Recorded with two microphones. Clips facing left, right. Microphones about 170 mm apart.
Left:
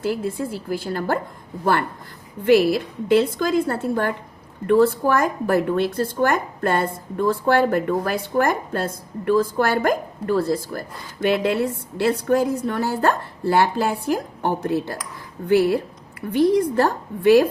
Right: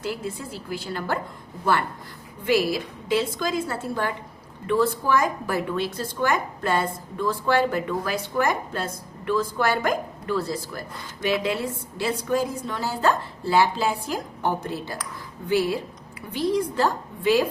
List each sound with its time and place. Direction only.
0.0 s a woman's voice: 50° left (ahead or behind)
2.4 s a woman's voice: 55° left (ahead or behind)